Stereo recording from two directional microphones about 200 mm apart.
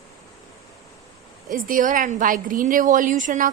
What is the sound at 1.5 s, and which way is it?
A woman's voice, 45° right (ahead or behind).